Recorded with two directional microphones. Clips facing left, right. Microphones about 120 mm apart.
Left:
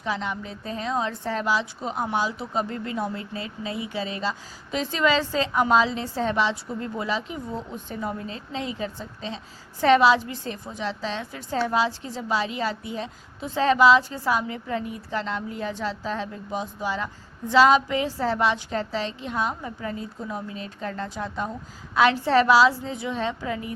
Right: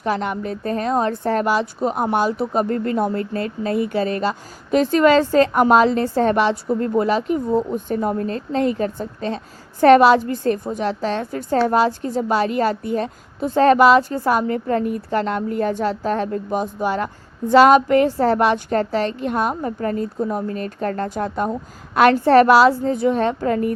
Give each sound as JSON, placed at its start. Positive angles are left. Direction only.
{"t": 0.0, "sound": "speech", "side_deg": -55}